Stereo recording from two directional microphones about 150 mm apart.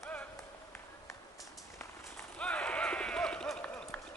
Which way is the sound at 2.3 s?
10° left (ahead or behind).